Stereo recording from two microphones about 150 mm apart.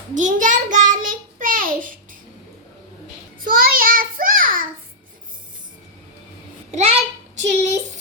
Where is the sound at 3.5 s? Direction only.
70° right (ahead or behind).